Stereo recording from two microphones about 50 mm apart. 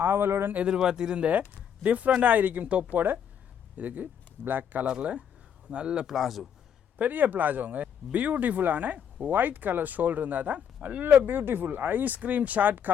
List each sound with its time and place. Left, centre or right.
0.0 s speech: right
0.7 s speech: centre; by 4.9 s right
5.7 s speech: centre
7.0 s speech: right
11.3 s speech: right